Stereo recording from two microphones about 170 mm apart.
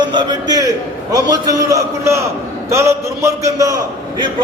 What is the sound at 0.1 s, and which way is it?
A man's voice, 25° right (ahead or behind).